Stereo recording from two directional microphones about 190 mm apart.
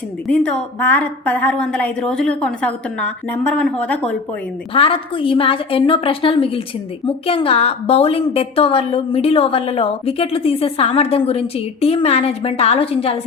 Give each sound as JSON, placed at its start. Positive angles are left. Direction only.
{"t": 0.3, "sound": "a woman's voice", "side_deg": 5}
{"t": 4.7, "sound": "a woman's voice", "side_deg": 30}